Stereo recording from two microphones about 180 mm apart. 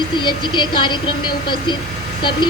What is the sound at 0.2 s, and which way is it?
Speech, 25° left (ahead or behind).